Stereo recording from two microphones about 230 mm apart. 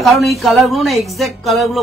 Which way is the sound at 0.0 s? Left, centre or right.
Centre.